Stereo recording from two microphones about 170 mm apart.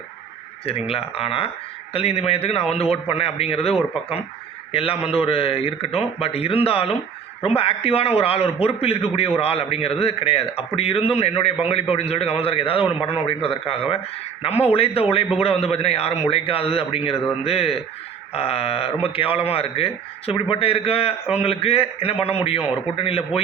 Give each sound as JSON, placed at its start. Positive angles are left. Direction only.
{"t": 0.6, "sound": "a man's voice", "side_deg": 35}